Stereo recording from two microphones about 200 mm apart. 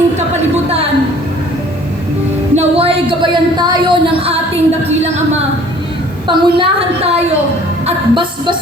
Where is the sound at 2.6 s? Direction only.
30° right (ahead or behind).